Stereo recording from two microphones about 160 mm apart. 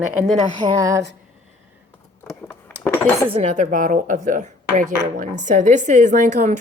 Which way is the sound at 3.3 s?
50° right (ahead or behind).